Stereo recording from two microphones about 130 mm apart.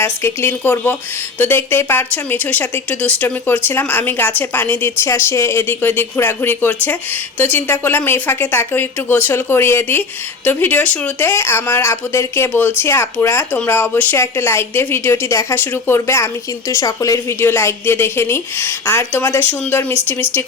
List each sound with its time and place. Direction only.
0.0 s a woman's voice: 20° left (ahead or behind)